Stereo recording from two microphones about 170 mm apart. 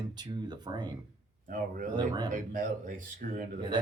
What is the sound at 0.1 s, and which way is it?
Speech, 25° right (ahead or behind).